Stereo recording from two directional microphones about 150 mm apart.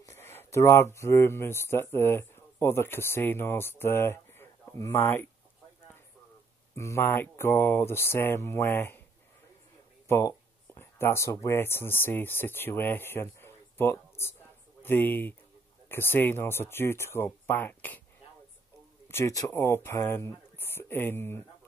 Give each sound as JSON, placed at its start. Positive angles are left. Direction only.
{"t": 0.0, "sound": "a sound", "side_deg": 15}
{"t": 0.4, "sound": "speech", "side_deg": 20}
{"t": 6.7, "sound": "speech", "side_deg": 20}
{"t": 10.0, "sound": "a sound", "side_deg": 20}
{"t": 11.4, "sound": "speech", "side_deg": 15}
{"t": 19.0, "sound": "speech", "side_deg": 15}